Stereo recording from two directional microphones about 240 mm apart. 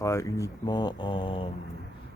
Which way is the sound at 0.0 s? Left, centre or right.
Centre.